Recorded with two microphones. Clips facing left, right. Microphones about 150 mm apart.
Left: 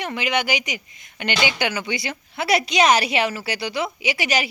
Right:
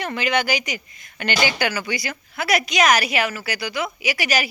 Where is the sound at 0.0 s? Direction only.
15° left (ahead or behind).